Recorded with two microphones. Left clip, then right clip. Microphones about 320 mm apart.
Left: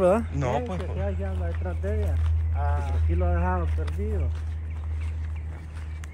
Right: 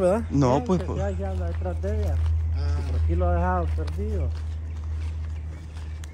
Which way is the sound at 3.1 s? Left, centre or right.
Right.